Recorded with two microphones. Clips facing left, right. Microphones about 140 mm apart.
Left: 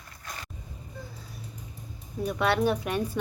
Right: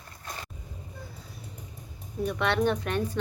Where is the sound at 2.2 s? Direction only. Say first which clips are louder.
Left 1 dB; 5° left (ahead or behind).